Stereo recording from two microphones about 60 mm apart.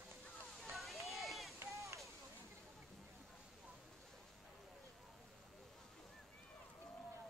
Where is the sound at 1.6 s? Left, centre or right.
Right.